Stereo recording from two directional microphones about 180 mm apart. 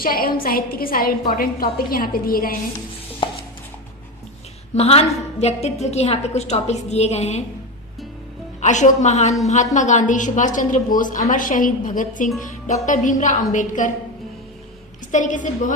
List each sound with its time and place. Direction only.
0.0 s a woman's voice: 55° left (ahead or behind)
4.7 s a woman's voice: 35° left (ahead or behind)
8.6 s a woman's voice: 40° left (ahead or behind)
15.1 s a woman's voice: 45° left (ahead or behind)